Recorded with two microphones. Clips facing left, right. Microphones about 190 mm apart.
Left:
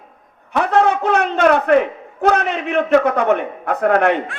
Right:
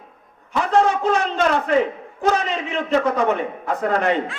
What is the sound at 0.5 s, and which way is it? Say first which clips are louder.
A man's voice: left 2 dB; 65° left (ahead or behind).